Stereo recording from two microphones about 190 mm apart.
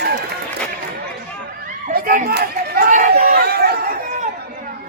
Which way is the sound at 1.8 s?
45° right (ahead or behind).